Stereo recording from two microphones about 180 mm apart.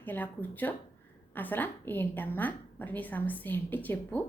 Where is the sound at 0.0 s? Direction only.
10° left (ahead or behind).